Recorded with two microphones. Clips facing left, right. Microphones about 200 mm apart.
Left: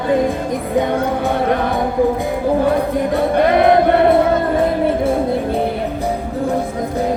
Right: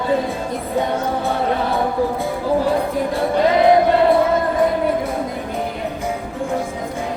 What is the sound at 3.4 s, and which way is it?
Chant, 55° left (ahead or behind).